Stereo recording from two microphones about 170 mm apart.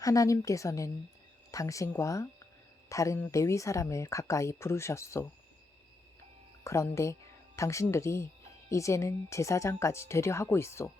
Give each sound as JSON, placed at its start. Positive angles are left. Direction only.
{"t": 0.0, "sound": "a woman's voice", "side_deg": 20}
{"t": 6.7, "sound": "speech", "side_deg": 15}